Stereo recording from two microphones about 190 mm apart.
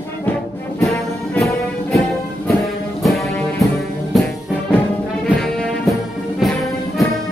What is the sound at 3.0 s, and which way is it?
Music, centre (ahead or behind).